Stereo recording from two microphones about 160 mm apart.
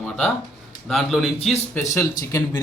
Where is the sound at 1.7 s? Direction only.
15° left (ahead or behind).